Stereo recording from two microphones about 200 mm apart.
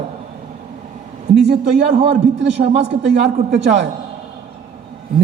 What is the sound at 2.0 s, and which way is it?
A man's voice, 60° right (ahead or behind).